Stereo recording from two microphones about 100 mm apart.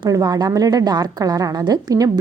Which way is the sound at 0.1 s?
40° right (ahead or behind).